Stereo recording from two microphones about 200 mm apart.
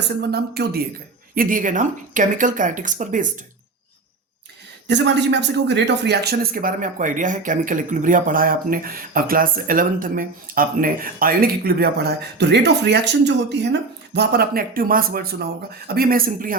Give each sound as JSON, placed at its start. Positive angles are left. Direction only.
{"t": 0.2, "sound": "speech", "side_deg": -55}
{"t": 4.9, "sound": "speech", "side_deg": -60}